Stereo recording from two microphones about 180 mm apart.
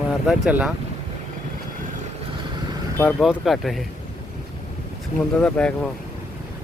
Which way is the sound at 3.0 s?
10° left (ahead or behind).